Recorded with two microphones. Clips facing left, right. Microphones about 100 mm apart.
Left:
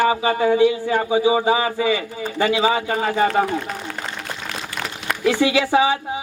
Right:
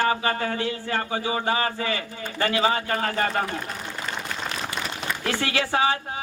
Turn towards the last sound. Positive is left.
turn(degrees=15)  # may be behind; listen again after turning